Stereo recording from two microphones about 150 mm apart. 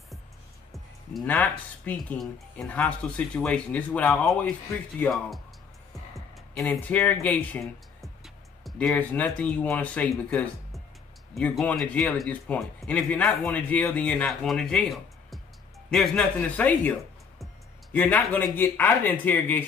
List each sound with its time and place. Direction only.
1.1 s speech: 10° left (ahead or behind)
17.9 s speech: 10° left (ahead or behind)